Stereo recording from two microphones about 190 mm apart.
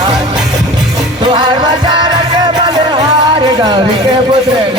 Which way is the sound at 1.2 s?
25° right (ahead or behind).